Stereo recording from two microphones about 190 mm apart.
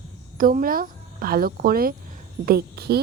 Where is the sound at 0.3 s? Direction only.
45° right (ahead or behind).